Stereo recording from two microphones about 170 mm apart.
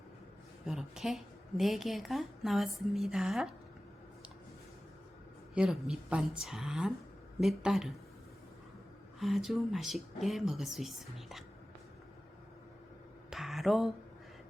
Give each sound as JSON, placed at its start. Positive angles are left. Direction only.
{"t": 0.6, "sound": "a woman's voice", "side_deg": 0}
{"t": 5.5, "sound": "a woman's voice", "side_deg": 0}
{"t": 9.1, "sound": "a woman's voice", "side_deg": 0}
{"t": 13.3, "sound": "a sound", "side_deg": 0}